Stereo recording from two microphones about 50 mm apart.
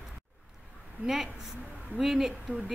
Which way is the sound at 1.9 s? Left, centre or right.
Centre.